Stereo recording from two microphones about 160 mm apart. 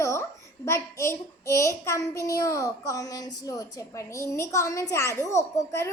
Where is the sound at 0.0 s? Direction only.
20° left (ahead or behind).